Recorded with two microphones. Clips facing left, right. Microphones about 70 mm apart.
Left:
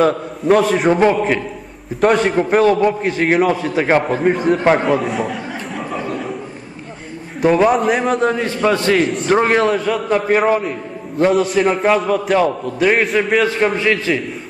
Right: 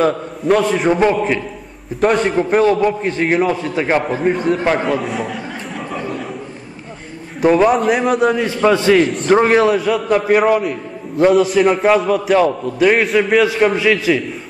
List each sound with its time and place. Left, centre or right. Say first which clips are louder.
0.0 s a man's voice: left 1 dB; centre
3.7 s a man's voice: left 3 dB; centre
4.0 s a man's voice: left 1 dB; centre
4.7 s a sound: left 2 dB; centre
7.4 s a man's voice: right 1 dB; centre
8.9 s a man's voice: right 2 dB; centre